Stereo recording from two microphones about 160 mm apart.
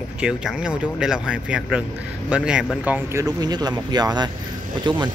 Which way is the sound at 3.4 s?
25° right (ahead or behind).